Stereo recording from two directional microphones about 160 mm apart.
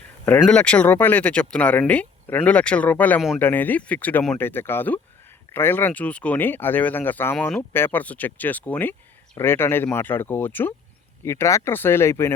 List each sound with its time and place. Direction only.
0.3 s speech: 5° left (ahead or behind)